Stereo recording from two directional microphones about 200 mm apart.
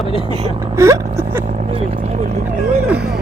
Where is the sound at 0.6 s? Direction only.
15° right (ahead or behind).